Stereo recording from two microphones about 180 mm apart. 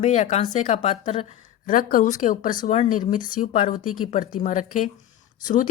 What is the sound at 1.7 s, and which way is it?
A woman's voice, 50° left (ahead or behind).